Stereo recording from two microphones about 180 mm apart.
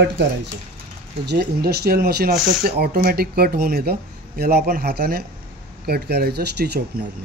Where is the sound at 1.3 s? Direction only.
60° right (ahead or behind).